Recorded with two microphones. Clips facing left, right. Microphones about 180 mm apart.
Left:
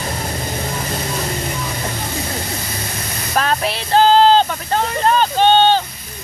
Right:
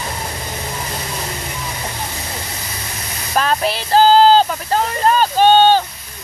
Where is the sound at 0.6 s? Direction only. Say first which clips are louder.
Left 3 dB; 45° left (ahead or behind).